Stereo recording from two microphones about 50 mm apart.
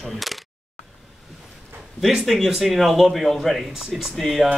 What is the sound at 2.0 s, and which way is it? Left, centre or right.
Speech, centre.